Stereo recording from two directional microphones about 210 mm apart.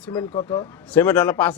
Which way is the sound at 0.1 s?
20° left (ahead or behind).